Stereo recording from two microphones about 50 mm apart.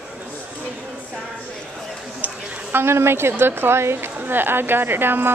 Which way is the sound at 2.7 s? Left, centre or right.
Right.